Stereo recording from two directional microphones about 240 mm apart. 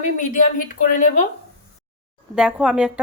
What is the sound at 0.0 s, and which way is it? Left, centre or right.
Speech, left.